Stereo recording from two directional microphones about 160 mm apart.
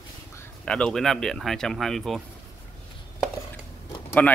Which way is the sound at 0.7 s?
5° left (ahead or behind).